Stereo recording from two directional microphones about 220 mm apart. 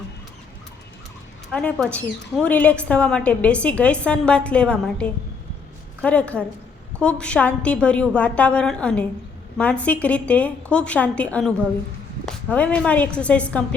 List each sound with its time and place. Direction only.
1.5 s a woman's voice: 5° left (ahead or behind)